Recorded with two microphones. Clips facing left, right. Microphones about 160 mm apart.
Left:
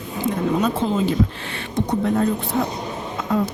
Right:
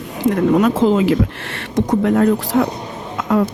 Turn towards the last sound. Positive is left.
turn(degrees=-90)